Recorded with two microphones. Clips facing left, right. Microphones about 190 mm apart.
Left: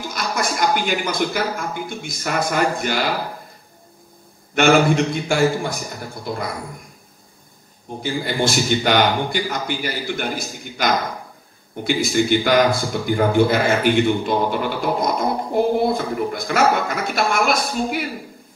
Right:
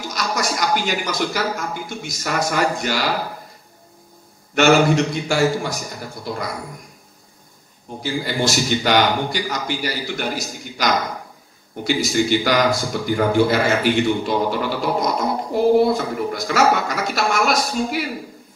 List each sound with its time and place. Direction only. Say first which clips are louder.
0.0 s speech: even; 55° left (ahead or behind)
4.6 s speech: even; 50° left (ahead or behind)
8.0 s speech: even; 55° left (ahead or behind)